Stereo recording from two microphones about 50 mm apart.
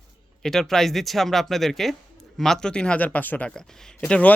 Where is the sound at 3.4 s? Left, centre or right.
Centre.